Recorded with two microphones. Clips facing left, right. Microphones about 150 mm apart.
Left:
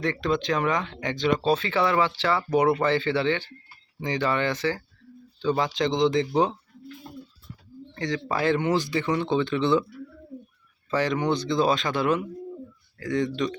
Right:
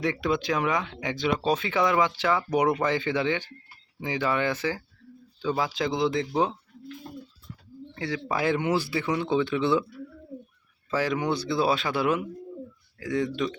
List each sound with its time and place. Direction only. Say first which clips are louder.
0.0 s speech: left 1 dB; 10° right (ahead or behind)
7.9 s speech: left 2 dB; 10° right (ahead or behind)
10.9 s speech: left 2 dB; 5° right (ahead or behind)